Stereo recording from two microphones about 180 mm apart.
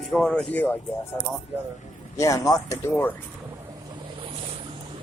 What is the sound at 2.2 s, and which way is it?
Speech, 20° left (ahead or behind).